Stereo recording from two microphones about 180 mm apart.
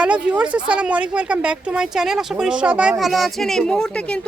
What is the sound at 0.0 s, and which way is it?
Speech, 5° right (ahead or behind).